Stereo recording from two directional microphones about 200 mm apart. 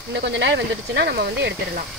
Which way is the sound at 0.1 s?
60° right (ahead or behind).